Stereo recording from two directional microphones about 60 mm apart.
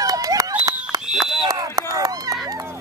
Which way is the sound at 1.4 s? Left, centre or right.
Right.